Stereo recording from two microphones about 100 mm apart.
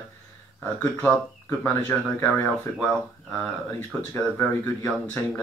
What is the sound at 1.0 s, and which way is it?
Speech, 15° left (ahead or behind).